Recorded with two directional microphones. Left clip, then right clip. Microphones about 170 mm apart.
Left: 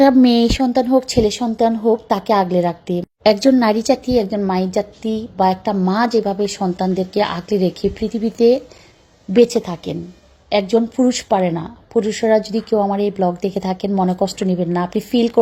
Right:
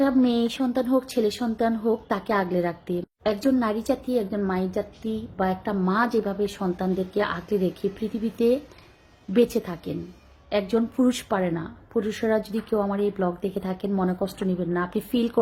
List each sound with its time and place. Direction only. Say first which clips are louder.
0.0 s a woman's voice: left 10 dB; 35° left (ahead or behind)
3.2 s a woman's voice: left 11 dB; 35° left (ahead or behind); by 15.3 s 15° left (ahead or behind)